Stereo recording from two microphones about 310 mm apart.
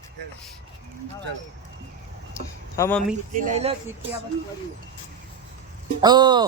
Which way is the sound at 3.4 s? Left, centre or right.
Right.